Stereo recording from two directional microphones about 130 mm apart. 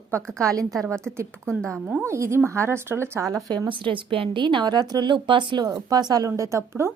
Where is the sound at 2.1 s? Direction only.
20° right (ahead or behind).